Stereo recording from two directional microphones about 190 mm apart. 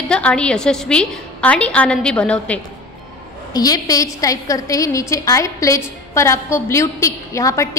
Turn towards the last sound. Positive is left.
turn(degrees=15)  # may be behind; listen again after turning